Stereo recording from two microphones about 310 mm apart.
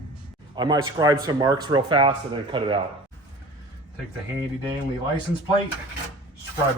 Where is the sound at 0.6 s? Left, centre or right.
Centre.